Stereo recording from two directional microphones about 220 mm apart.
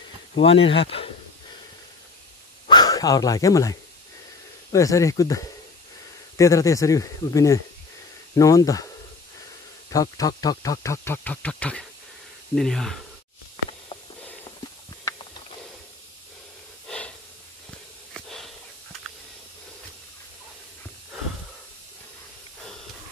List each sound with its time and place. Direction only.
0.4 s speech: 25° left (ahead or behind)
2.7 s speech: 20° left (ahead or behind)
4.7 s speech: 15° left (ahead or behind)
9.8 s speech: 15° left (ahead or behind)
18.1 s a sound: centre (ahead or behind)